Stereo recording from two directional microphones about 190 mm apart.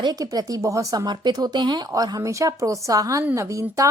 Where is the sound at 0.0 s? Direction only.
20° right (ahead or behind).